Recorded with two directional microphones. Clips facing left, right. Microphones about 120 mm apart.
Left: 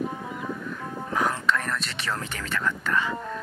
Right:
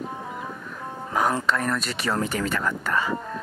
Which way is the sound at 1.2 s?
35° right (ahead or behind).